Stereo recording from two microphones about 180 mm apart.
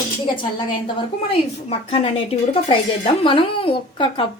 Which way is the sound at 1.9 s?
30° left (ahead or behind).